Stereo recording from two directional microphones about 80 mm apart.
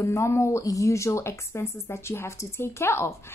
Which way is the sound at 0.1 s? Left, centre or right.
Left.